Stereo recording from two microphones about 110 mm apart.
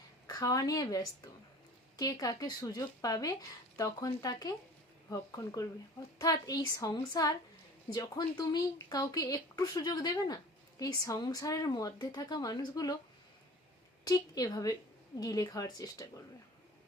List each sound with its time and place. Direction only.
0.3 s speech: 35° left (ahead or behind)
14.0 s speech: 35° left (ahead or behind)